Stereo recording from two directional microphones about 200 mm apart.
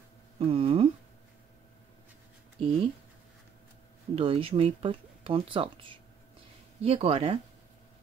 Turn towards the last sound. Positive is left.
turn(degrees=-25)  # may be behind; listen again after turning